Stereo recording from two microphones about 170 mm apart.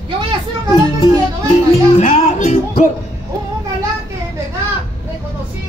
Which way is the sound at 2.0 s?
40° left (ahead or behind).